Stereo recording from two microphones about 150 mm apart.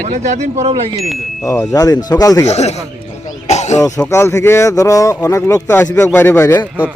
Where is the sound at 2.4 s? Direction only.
45° left (ahead or behind).